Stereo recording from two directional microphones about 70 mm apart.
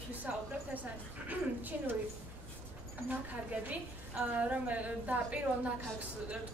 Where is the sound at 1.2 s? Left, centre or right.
Right.